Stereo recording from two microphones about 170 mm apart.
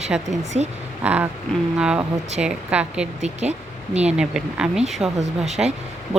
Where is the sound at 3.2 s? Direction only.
40° right (ahead or behind).